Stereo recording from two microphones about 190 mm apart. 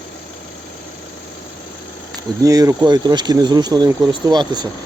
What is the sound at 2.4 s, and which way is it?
Speech, 20° right (ahead or behind).